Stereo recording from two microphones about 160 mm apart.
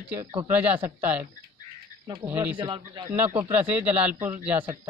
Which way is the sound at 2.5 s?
30° right (ahead or behind).